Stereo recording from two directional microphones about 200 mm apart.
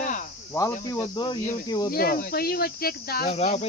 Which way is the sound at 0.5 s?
15° left (ahead or behind).